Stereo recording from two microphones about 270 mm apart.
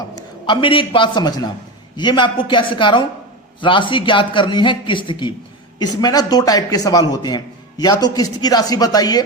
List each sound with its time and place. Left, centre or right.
0.4 s a man's voice: centre